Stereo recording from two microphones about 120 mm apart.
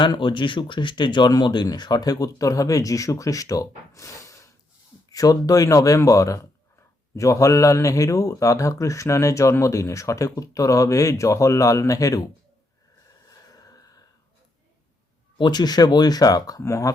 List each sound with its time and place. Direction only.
0.0 s speech: 40° left (ahead or behind)
13.6 s a sound: 30° left (ahead or behind)
15.4 s speech: 35° left (ahead or behind)